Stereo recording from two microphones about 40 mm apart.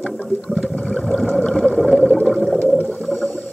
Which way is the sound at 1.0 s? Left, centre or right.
Centre.